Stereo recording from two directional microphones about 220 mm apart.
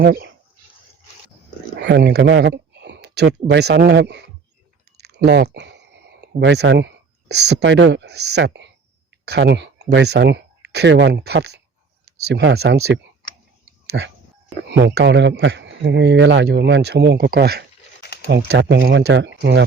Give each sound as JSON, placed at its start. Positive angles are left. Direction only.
{"t": 0.0, "sound": "speech", "side_deg": -50}
{"t": 1.8, "sound": "speech", "side_deg": -50}
{"t": 18.0, "sound": "a sound", "side_deg": 50}
{"t": 18.3, "sound": "speech", "side_deg": -50}